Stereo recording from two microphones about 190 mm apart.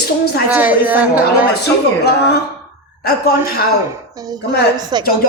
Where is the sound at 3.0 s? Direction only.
55° left (ahead or behind).